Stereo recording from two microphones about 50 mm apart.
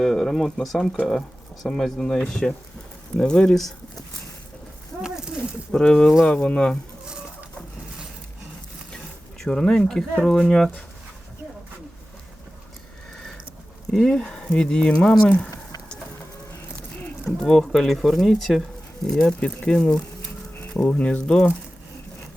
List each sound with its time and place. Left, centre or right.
0.0 s speech: centre
5.0 s a sound: centre
5.7 s speech: centre
9.5 s speech: centre
13.9 s speech: centre
17.2 s speech: centre